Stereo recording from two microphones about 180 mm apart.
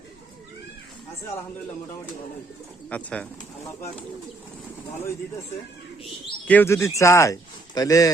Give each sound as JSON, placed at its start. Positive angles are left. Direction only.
{"t": 2.9, "sound": "speech", "side_deg": 5}
{"t": 6.5, "sound": "speech", "side_deg": 15}